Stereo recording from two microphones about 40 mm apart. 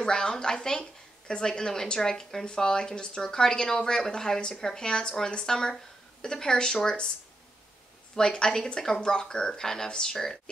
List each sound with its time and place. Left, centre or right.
0.0 s a woman's voice: centre
8.2 s a woman's voice: left